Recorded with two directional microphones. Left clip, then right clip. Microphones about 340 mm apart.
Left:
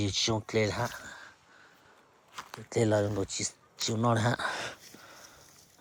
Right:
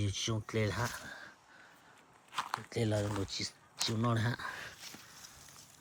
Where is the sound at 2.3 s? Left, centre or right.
Centre.